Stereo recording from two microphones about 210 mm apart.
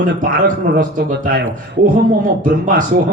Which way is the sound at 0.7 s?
40° right (ahead or behind).